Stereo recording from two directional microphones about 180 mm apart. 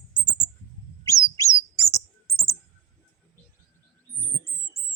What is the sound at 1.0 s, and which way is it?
Bird, 15° left (ahead or behind).